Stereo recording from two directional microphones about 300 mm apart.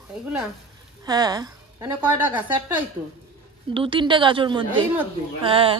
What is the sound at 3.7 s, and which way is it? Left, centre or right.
A woman's voice, centre.